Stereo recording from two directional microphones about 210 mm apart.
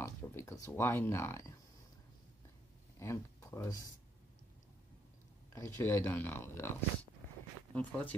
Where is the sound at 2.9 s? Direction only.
15° left (ahead or behind).